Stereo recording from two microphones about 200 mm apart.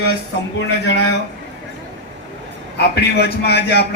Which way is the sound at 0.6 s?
60° left (ahead or behind).